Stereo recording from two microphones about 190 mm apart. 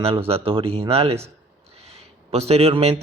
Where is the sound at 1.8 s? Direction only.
35° right (ahead or behind).